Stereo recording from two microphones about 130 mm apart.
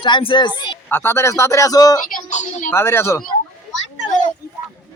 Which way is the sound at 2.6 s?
20° left (ahead or behind).